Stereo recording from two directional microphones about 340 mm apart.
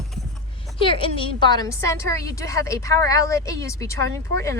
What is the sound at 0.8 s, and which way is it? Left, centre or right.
A woman's voice, centre.